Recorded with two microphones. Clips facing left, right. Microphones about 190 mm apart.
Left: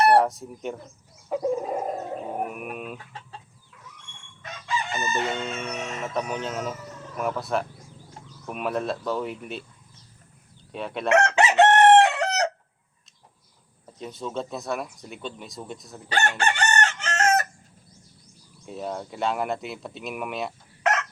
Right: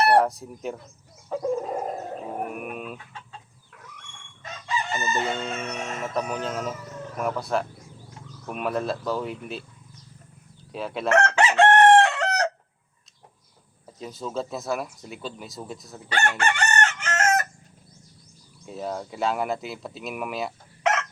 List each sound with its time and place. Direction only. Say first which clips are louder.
0.0 s speech: left 1 dB; centre (ahead or behind)
1.3 s chicken: left 2 dB; 10° left (ahead or behind)
2.2 s speech: left 1 dB; centre (ahead or behind)
5.1 s speech: even; centre (ahead or behind)
10.7 s speech: right 1 dB; centre (ahead or behind)
11.1 s chicken: left 1 dB; 20° left (ahead or behind)
14.0 s speech: right 1 dB; centre (ahead or behind)
16.0 s chicken: even; 30° left (ahead or behind)
18.6 s speech: right 1 dB; centre (ahead or behind)